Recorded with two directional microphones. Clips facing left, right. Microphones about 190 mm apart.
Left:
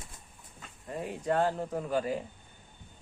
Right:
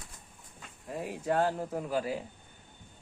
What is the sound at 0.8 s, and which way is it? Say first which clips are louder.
Speech: even; 5° right (ahead or behind).